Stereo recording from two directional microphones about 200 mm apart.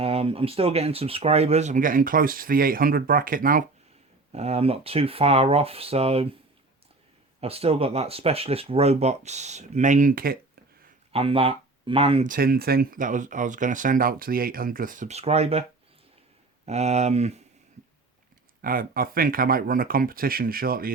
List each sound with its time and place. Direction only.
0.0 s speech: 30° right (ahead or behind)
4.3 s speech: 30° right (ahead or behind)
7.4 s speech: 30° right (ahead or behind); by 10.6 s 45° right (ahead or behind)
11.1 s speech: 30° right (ahead or behind)
12.3 s speech: 50° right (ahead or behind); by 15.6 s 30° right (ahead or behind)
16.6 s speech: 35° right (ahead or behind)
18.6 s speech: 45° right (ahead or behind)